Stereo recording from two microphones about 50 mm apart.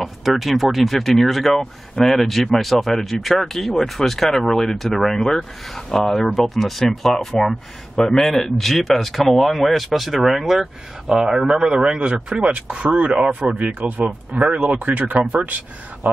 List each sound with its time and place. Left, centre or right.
0.0 s speech: centre
11.8 s speech: right